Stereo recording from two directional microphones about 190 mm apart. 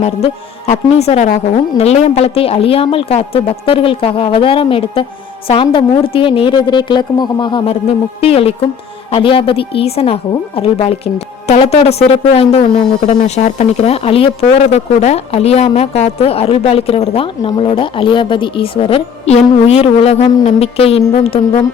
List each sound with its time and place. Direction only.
0.7 s a woman's voice: 35° left (ahead or behind)